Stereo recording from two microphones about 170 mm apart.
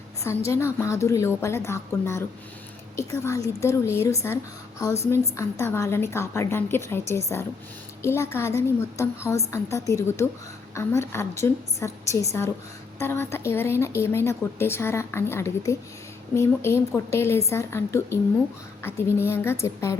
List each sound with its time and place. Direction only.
0.3 s a woman's voice: 15° left (ahead or behind)
5.4 s a woman's voice: 15° left (ahead or behind)